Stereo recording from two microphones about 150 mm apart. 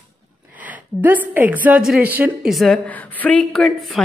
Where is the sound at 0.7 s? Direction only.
10° right (ahead or behind).